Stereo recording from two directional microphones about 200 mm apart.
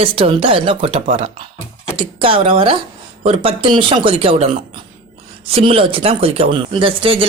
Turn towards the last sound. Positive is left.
turn(degrees=-25)  # may be behind; listen again after turning